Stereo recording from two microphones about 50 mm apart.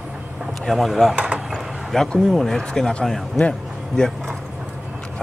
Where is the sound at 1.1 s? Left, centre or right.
Right.